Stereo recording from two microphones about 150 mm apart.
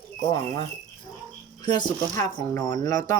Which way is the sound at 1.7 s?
30° left (ahead or behind).